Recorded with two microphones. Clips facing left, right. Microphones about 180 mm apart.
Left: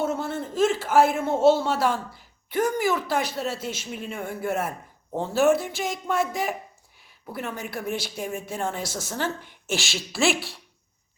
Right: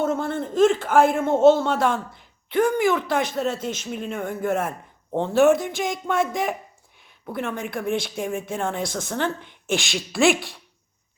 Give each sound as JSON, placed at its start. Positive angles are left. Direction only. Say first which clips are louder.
{"t": 0.0, "sound": "a sound", "louder": "right 3 dB", "side_deg": 10}
{"t": 0.9, "sound": "a woman's voice", "louder": "left 1 dB", "side_deg": 5}
{"t": 2.6, "sound": "speech", "louder": "right 4 dB", "side_deg": 40}
{"t": 3.1, "sound": "a woman's voice", "louder": "right 3 dB", "side_deg": 5}
{"t": 8.4, "sound": "speech", "louder": "right 3 dB", "side_deg": -55}
{"t": 8.8, "sound": "speech", "louder": "right 4 dB", "side_deg": 5}